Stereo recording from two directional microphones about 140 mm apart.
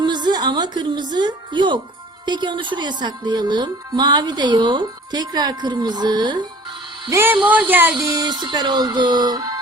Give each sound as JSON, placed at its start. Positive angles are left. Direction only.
{"t": 0.0, "sound": "a woman's voice", "side_deg": -30}
{"t": 7.1, "sound": "speech", "side_deg": -15}
{"t": 7.9, "sound": "music", "side_deg": -30}